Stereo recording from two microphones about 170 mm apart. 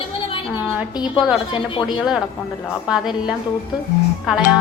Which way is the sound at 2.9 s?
5° right (ahead or behind).